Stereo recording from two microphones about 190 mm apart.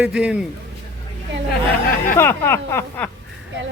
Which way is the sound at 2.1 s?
15° left (ahead or behind).